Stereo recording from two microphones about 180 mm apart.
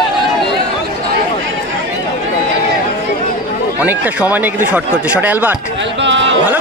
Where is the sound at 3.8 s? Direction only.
10° right (ahead or behind).